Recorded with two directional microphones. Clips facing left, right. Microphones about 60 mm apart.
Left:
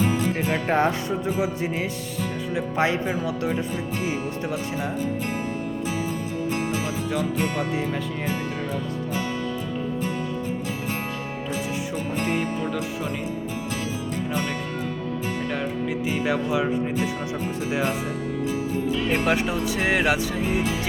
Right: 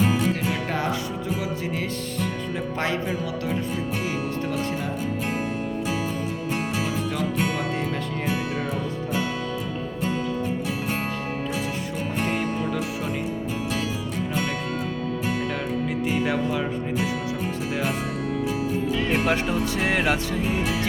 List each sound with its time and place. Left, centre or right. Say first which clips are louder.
0.4 s speech: left 4 dB; left
1.4 s speech: left 3 dB; left
16.0 s speech: even; centre
19.1 s speech: even; centre